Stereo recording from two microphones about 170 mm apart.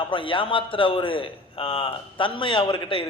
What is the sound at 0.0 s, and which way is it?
A man's voice, 30° left (ahead or behind).